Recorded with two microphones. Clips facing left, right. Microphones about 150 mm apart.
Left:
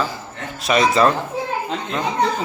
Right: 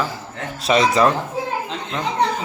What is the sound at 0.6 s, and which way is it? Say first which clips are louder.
Speech: even; 25° right (ahead or behind).